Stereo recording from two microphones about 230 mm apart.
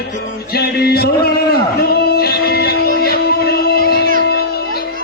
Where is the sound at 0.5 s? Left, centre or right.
Left.